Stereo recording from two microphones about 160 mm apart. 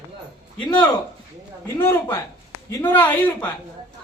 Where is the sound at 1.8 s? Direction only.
15° left (ahead or behind).